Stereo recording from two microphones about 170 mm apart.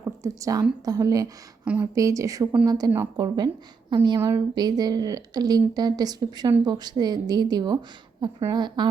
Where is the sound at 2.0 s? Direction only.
20° right (ahead or behind).